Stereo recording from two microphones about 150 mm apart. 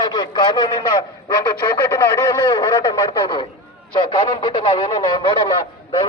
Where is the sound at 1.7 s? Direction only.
20° left (ahead or behind).